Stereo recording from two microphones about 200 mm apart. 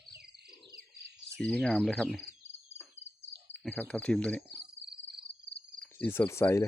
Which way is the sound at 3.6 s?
5° left (ahead or behind).